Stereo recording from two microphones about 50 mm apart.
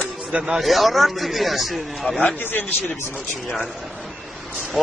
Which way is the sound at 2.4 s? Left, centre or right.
Left.